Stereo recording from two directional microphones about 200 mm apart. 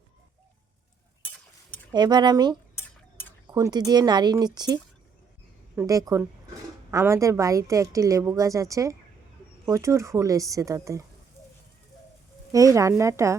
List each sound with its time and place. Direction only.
1.9 s a woman's voice: 20° right (ahead or behind)
12.5 s a woman's voice: 15° right (ahead or behind)